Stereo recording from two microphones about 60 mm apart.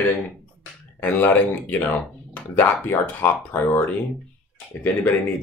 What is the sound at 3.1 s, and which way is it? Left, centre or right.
Speech, left.